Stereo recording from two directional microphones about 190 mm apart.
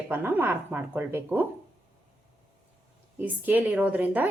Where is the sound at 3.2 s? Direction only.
10° right (ahead or behind).